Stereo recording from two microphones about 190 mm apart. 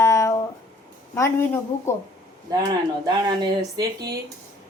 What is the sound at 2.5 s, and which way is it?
Speech, 20° right (ahead or behind).